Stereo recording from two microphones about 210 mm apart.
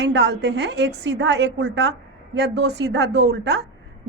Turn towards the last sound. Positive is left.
turn(degrees=-55)  # may be behind; listen again after turning